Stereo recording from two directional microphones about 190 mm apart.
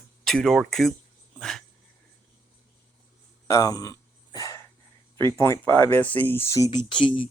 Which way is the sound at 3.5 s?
20° left (ahead or behind).